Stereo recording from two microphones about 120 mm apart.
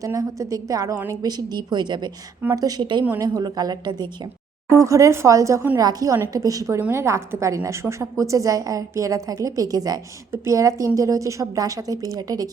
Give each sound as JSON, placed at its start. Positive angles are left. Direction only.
{"t": 0.0, "sound": "a woman's voice", "side_deg": -25}